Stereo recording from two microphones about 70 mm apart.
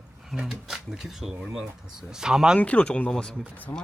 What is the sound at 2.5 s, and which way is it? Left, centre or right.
Speech, centre.